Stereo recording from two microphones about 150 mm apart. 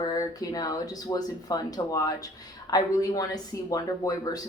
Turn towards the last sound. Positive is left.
turn(degrees=25)  # may be behind; listen again after turning